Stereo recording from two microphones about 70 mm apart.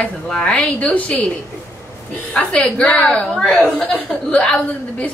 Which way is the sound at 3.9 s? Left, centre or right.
Centre.